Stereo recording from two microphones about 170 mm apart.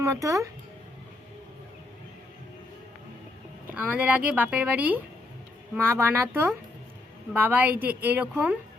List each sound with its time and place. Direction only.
0.0 s speech: 20° right (ahead or behind)
3.8 s speech: 10° right (ahead or behind)